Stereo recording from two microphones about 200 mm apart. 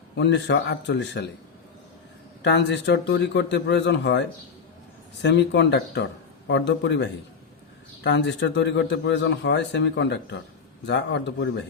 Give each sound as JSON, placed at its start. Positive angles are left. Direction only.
{"t": 0.2, "sound": "a man's voice", "side_deg": 60}
{"t": 2.4, "sound": "a man's voice", "side_deg": 60}